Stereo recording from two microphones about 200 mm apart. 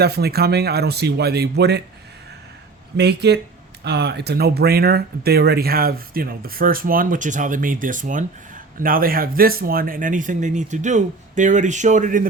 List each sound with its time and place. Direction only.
0.0 s speech: 55° right (ahead or behind)
3.0 s speech: 55° right (ahead or behind)